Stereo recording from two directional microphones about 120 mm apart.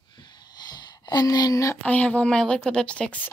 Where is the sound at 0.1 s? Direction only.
40° left (ahead or behind).